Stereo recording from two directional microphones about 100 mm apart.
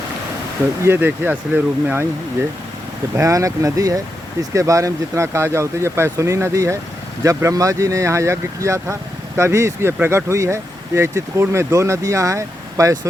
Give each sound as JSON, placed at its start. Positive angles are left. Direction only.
{"t": 0.9, "sound": "speech", "side_deg": -20}
{"t": 3.2, "sound": "speech", "side_deg": -30}